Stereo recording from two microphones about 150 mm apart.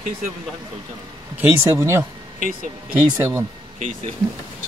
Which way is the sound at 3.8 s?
50° right (ahead or behind).